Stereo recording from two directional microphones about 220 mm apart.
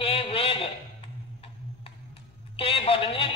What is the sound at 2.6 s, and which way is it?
Speech, 25° left (ahead or behind).